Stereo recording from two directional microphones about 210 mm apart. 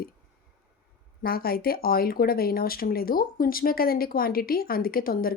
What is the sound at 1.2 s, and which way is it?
Speech, 45° left (ahead or behind).